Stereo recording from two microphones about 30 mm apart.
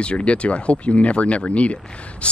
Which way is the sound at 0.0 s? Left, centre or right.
Left.